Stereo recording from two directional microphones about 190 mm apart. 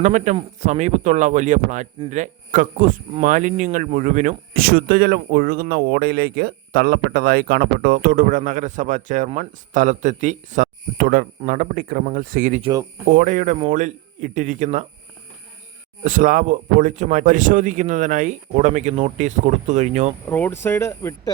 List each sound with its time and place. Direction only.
0.0 s speech: 35° right (ahead or behind)
16.0 s speech: 45° right (ahead or behind)
20.2 s speech: 10° left (ahead or behind)